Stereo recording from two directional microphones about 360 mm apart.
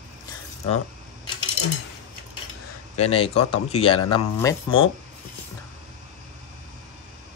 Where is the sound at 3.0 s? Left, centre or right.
Centre.